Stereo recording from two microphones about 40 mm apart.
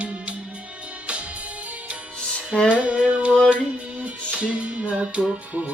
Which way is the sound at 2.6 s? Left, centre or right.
Right.